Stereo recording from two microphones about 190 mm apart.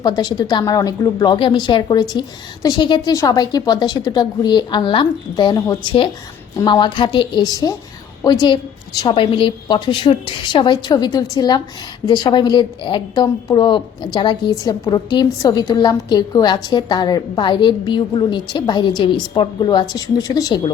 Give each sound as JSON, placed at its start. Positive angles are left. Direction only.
{"t": 0.0, "sound": "a woman's voice", "side_deg": 20}